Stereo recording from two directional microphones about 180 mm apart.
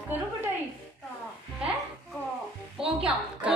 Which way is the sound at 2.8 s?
5° right (ahead or behind).